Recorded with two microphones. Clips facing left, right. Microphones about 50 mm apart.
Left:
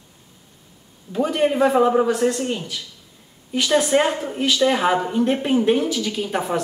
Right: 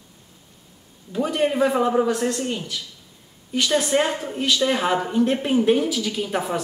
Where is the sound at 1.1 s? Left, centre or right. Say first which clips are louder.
Left 2 dB; centre.